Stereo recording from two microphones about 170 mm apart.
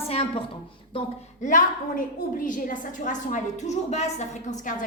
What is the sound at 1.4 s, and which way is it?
A woman's voice, 50° left (ahead or behind).